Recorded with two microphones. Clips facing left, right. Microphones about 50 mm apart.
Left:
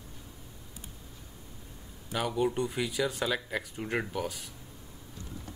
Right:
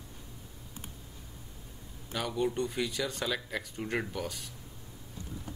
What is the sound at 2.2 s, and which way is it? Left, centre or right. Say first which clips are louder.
Speech: left 2 dB; centre.